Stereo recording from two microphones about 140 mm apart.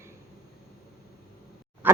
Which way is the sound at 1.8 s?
10° right (ahead or behind).